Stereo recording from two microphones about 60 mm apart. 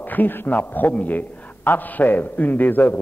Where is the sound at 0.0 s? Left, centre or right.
Left.